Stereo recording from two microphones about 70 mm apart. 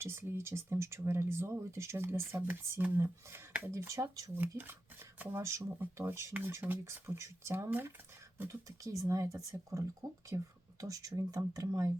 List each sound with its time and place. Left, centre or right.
0.0 s speech: right
4.4 s speech: right
5.4 s speech: right
5.8 s speech: right
6.8 s speech: right